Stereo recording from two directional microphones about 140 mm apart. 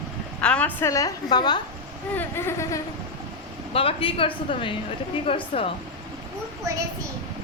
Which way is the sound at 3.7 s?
40° left (ahead or behind).